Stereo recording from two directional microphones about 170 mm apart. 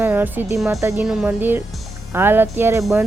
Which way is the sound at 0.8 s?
15° right (ahead or behind).